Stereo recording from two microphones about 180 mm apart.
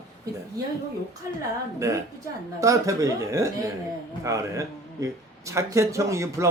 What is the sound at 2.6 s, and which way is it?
Speech, 15° right (ahead or behind).